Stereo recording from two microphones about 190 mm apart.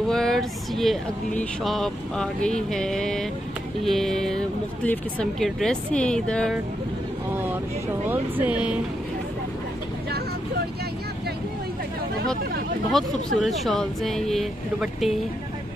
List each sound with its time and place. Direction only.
0.1 s speech: centre (ahead or behind)
8.1 s speech: 10° right (ahead or behind)
12.9 s speech: centre (ahead or behind)